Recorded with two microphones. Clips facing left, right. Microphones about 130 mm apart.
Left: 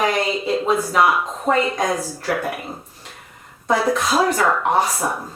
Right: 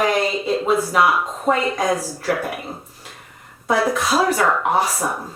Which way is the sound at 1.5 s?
Centre (ahead or behind).